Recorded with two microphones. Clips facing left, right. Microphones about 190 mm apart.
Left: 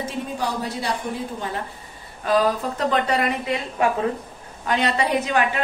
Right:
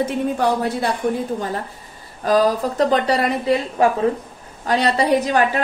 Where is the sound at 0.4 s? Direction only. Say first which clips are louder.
Right 6 dB; 55° right (ahead or behind).